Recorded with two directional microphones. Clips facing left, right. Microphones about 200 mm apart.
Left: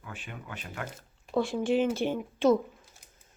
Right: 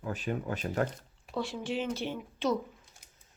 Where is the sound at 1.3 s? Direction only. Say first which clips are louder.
Left 7 dB; 50° left (ahead or behind).